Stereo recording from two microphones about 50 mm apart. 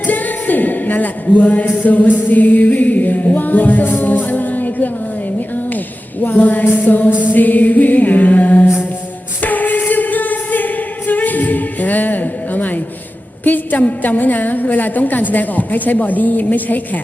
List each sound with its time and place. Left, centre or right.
0.1 s speech: left
5.5 s a sound: left
7.3 s a woman's voice: left
9.4 s singing: left
13.4 s a woman's voice: left